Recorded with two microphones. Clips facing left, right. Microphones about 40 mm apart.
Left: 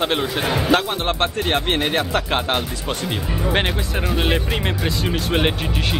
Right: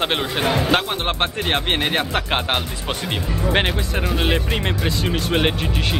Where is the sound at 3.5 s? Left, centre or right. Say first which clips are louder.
Right 1 dB; centre.